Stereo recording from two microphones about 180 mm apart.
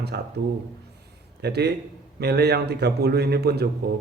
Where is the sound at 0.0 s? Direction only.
65° right (ahead or behind).